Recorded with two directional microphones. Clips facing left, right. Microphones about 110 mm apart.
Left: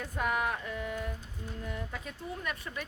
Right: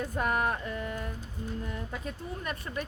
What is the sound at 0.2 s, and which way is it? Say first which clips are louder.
Speech: right 2 dB; 45° right (ahead or behind).